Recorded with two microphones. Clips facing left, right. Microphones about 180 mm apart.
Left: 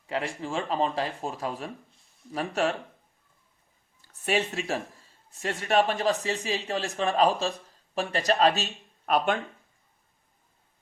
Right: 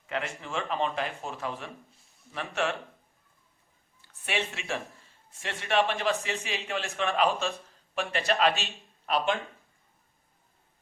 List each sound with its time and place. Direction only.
0.1 s speech: 30° left (ahead or behind)
4.0 s a man's voice: 40° left (ahead or behind)